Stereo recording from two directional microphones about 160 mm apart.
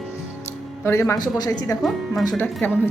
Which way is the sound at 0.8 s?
15° left (ahead or behind).